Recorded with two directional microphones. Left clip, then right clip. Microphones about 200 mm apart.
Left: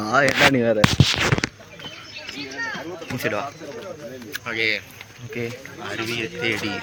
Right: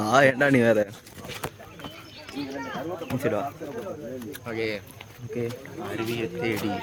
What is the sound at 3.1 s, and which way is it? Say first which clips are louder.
Speech: left 2 dB; 5° right (ahead or behind).